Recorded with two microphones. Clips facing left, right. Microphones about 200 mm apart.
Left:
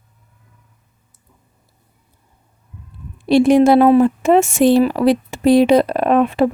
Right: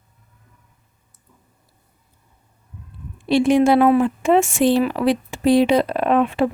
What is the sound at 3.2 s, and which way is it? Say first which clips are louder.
Speech: left 4 dB; 40° left (ahead or behind).